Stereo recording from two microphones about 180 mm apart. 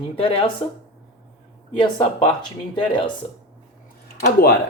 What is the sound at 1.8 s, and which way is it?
Speech, 30° left (ahead or behind).